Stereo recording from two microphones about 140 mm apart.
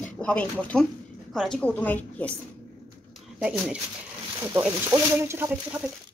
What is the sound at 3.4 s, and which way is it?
Speech, 10° right (ahead or behind).